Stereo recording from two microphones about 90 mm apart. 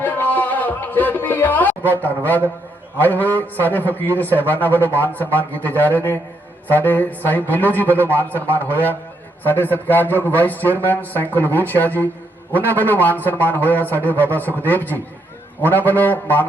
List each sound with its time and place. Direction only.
0.0 s music: 20° left (ahead or behind)
1.9 s a man's voice: 20° left (ahead or behind)